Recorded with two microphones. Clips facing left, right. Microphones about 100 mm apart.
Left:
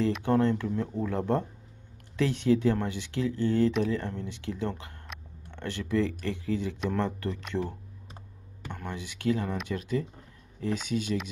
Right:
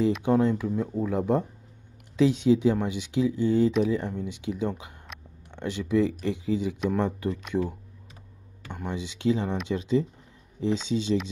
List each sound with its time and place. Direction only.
0.2 s speech: 15° right (ahead or behind)
8.6 s speech: 15° right (ahead or behind)